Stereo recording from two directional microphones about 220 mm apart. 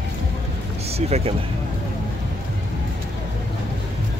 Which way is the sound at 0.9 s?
30° right (ahead or behind).